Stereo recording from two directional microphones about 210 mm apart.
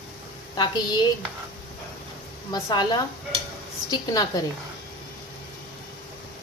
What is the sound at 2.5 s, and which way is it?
A woman's voice, 20° left (ahead or behind).